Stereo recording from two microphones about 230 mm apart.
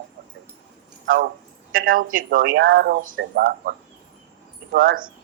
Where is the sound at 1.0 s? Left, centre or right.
Right.